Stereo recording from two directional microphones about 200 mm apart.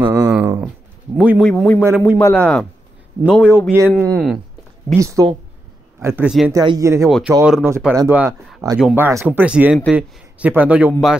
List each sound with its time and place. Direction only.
0.0 s a sound: 15° right (ahead or behind)
1.1 s speech: 5° right (ahead or behind)
1.4 s a man's voice: 5° left (ahead or behind)
3.5 s a man's voice: 10° right (ahead or behind)
3.9 s speech: 5° left (ahead or behind)
4.9 s a man's voice: 15° right (ahead or behind)
6.5 s a man's voice: 20° right (ahead or behind)
7.1 s a man's voice: centre (ahead or behind)